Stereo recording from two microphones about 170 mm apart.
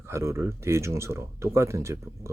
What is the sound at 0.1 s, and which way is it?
Speech, 15° right (ahead or behind).